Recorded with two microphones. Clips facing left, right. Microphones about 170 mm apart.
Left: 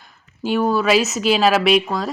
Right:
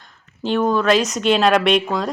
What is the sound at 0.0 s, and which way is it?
A woman's voice, 5° left (ahead or behind).